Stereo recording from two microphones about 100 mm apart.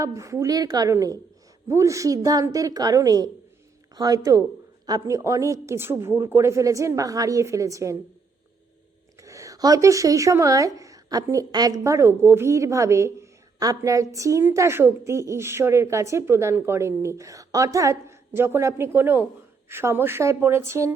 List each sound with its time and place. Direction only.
0.0 s speech: 30° right (ahead or behind)
9.2 s a woman's voice: 30° right (ahead or behind)